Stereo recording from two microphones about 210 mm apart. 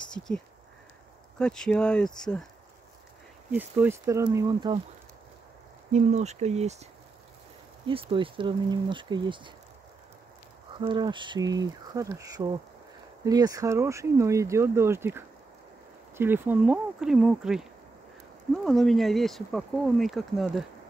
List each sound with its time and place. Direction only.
1.4 s speech: 5° left (ahead or behind)
3.5 s speech: 10° right (ahead or behind)
5.9 s speech: 35° right (ahead or behind)
7.8 s speech: 25° right (ahead or behind)
10.8 s speech: 20° right (ahead or behind); by 20.6 s centre (ahead or behind)